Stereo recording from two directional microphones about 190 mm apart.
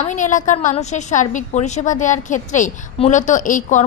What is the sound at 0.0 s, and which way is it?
A woman's voice, 40° left (ahead or behind).